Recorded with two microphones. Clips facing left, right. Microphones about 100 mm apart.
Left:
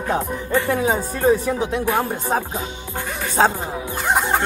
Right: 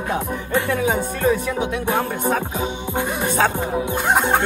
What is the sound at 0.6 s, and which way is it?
Speech, 15° left (ahead or behind).